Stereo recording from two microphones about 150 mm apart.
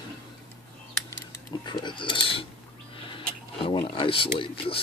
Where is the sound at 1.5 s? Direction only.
30° left (ahead or behind).